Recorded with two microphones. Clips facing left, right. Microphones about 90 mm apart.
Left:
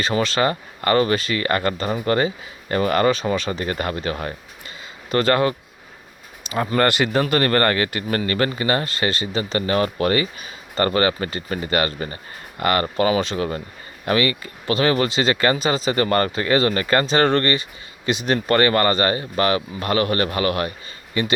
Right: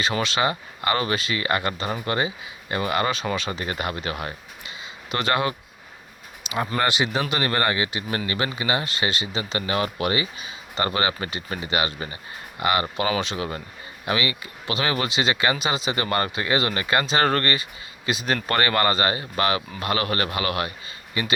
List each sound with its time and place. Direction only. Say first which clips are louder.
0.0 s speech: left 3 dB; 35° left (ahead or behind)